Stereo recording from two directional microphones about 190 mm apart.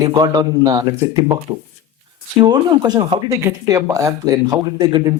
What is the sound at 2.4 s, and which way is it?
Speech, 20° right (ahead or behind).